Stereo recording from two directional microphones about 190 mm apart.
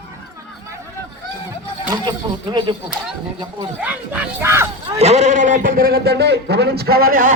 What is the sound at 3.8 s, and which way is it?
Speech, 5° right (ahead or behind).